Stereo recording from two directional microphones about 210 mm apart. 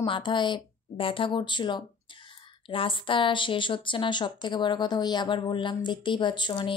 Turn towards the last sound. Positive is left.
turn(degrees=25)  # may be behind; listen again after turning